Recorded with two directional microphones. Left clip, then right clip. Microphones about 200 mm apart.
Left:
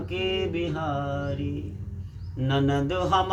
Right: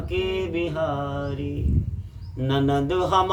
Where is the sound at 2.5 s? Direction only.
25° right (ahead or behind).